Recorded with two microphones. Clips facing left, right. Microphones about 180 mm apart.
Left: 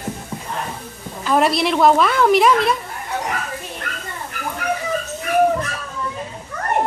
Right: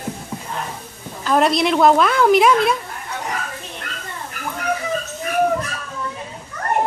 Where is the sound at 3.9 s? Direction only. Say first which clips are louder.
Left 2 dB; 60° left (ahead or behind).